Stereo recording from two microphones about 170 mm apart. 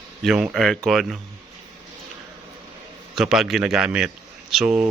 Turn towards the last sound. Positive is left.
turn(degrees=-5)  # may be behind; listen again after turning